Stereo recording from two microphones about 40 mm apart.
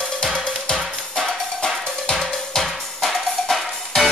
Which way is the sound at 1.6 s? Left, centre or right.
Centre.